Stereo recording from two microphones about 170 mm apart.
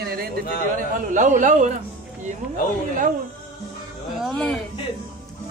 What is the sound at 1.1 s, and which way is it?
Speech, 50° right (ahead or behind).